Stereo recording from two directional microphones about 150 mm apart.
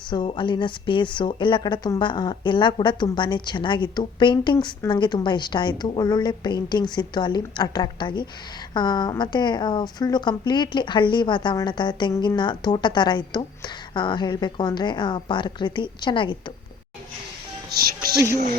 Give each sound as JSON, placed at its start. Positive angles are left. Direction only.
{"t": 0.1, "sound": "a woman's voice", "side_deg": 30}
{"t": 17.7, "sound": "speech", "side_deg": -80}